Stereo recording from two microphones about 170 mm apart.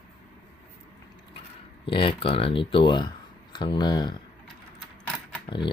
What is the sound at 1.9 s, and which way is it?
Speech, 30° left (ahead or behind).